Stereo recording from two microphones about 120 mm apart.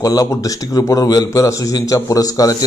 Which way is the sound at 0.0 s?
30° left (ahead or behind).